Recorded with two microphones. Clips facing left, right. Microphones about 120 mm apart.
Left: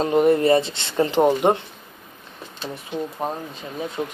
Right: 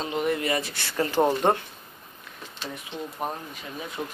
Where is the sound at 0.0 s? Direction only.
45° left (ahead or behind); by 1.5 s 15° left (ahead or behind).